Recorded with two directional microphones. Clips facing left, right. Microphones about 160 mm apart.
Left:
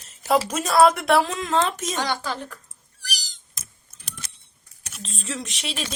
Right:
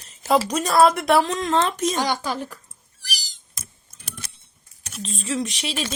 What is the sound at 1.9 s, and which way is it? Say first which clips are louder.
Speech: right 3 dB; 10° right (ahead or behind).